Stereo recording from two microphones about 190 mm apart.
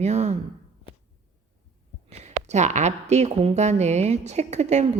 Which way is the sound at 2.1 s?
35° right (ahead or behind).